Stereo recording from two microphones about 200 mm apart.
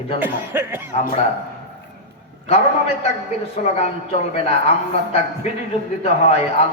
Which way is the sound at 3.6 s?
35° left (ahead or behind).